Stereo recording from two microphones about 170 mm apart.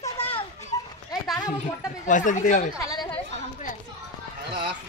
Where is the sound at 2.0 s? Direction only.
50° left (ahead or behind).